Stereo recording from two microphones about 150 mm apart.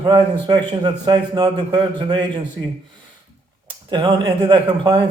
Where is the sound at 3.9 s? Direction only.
30° right (ahead or behind).